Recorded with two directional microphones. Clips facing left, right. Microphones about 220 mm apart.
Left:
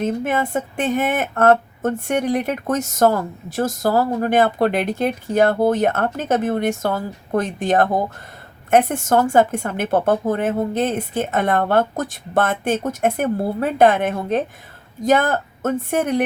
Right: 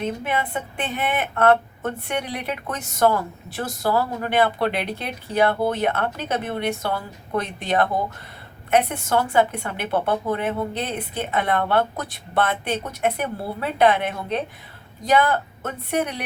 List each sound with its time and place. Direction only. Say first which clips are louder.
0.0 s a woman's voice: left 5 dB; 45° left (ahead or behind)